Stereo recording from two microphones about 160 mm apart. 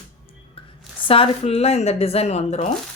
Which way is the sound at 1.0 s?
35° left (ahead or behind).